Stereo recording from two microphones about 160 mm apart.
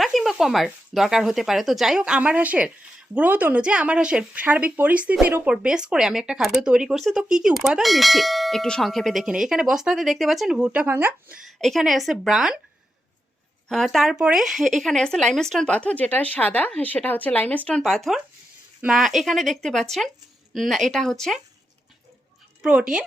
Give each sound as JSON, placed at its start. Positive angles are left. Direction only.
{"t": 0.0, "sound": "speech", "side_deg": 0}
{"t": 11.4, "sound": "speech", "side_deg": 0}
{"t": 13.7, "sound": "speech", "side_deg": 0}
{"t": 22.6, "sound": "speech", "side_deg": -5}